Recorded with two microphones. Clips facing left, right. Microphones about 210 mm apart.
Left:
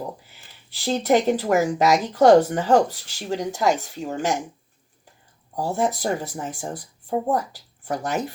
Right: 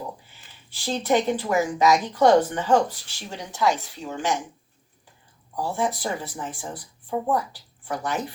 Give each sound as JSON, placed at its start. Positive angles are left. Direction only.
{"t": 0.9, "sound": "speech", "side_deg": 40}
{"t": 5.5, "sound": "speech", "side_deg": 40}